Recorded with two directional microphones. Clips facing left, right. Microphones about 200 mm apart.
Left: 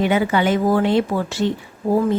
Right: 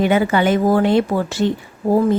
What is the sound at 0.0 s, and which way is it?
Speech, 50° right (ahead or behind).